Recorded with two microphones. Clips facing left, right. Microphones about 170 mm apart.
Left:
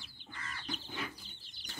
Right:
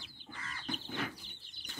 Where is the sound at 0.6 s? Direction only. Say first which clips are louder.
Right 4 dB; 65° right (ahead or behind).